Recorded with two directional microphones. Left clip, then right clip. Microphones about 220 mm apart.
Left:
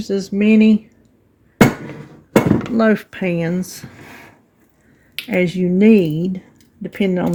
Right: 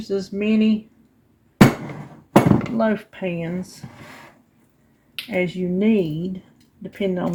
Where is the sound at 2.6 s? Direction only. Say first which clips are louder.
Left 5 dB; 55° left (ahead or behind).